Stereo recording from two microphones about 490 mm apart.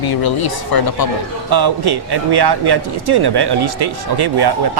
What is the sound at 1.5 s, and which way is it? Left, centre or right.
Speech, right.